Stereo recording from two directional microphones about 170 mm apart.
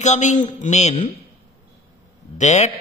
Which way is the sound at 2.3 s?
40° left (ahead or behind).